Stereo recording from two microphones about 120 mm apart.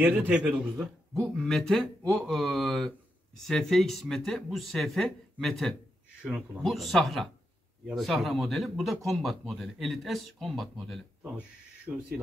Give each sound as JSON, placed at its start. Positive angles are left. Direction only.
{"t": 0.0, "sound": "a man's voice", "side_deg": -15}
{"t": 1.2, "sound": "speech", "side_deg": 5}
{"t": 11.9, "sound": "speech", "side_deg": -20}